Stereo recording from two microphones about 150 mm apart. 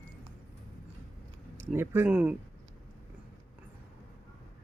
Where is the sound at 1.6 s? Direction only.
15° right (ahead or behind).